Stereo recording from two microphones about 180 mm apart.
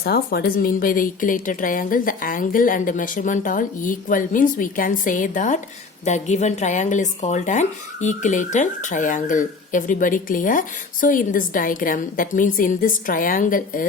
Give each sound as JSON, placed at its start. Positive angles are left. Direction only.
{"t": 0.0, "sound": "speech", "side_deg": 60}